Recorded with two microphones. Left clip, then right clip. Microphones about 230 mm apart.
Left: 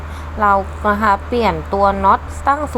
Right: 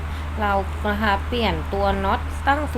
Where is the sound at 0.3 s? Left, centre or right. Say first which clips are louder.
Left 8 dB; centre.